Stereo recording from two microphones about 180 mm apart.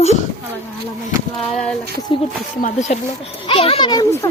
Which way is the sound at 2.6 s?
40° left (ahead or behind).